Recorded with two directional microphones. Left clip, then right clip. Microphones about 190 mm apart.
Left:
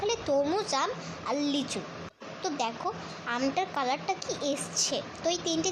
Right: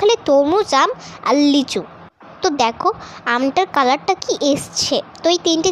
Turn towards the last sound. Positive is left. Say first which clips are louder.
# right 13 dB
turn(degrees=-40)  # may be behind; listen again after turning